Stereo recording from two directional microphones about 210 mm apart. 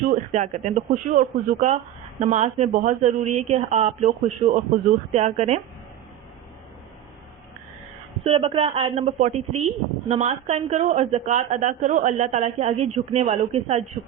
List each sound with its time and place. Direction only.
0.1 s speech: 35° right (ahead or behind)
8.3 s speech: 25° right (ahead or behind)